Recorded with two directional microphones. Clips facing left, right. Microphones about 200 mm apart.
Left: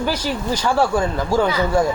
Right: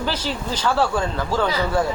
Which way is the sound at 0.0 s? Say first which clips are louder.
Left 3 dB; 10° left (ahead or behind).